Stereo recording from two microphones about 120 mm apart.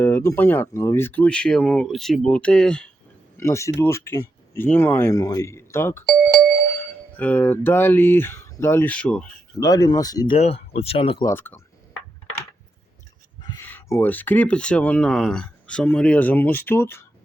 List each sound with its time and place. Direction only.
0.0 s speech: 20° left (ahead or behind)
3.3 s speech: 20° left (ahead or behind)
5.1 s speech: 30° left (ahead or behind)
7.2 s speech: 15° left (ahead or behind)
9.6 s speech: 30° left (ahead or behind)
10.3 s speech: 60° left (ahead or behind)
11.3 s speech: 20° left (ahead or behind)
13.6 s a sound: 20° left (ahead or behind)
14.0 s speech: 15° left (ahead or behind)